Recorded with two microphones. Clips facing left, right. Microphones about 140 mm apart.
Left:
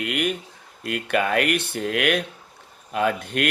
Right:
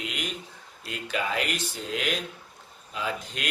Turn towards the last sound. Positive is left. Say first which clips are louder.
# left 10 dB
turn(degrees=60)  # may be behind; listen again after turning